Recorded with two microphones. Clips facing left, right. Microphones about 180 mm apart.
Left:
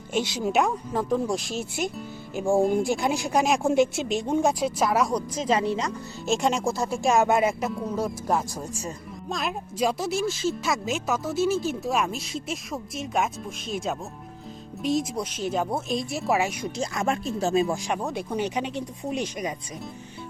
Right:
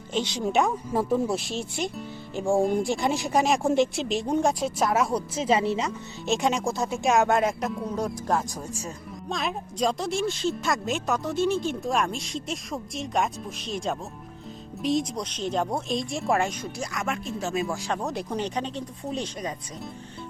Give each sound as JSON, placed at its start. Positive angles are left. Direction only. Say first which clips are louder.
{"t": 0.1, "sound": "speech", "louder": "left 1 dB", "side_deg": 10}
{"t": 0.9, "sound": "speech", "louder": "right 1 dB", "side_deg": -10}
{"t": 17.7, "sound": "speech", "louder": "left 2 dB", "side_deg": 15}
{"t": 18.0, "sound": "speech", "louder": "left 1 dB", "side_deg": 0}